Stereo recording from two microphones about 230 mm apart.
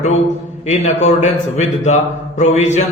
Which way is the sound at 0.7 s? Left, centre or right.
Left.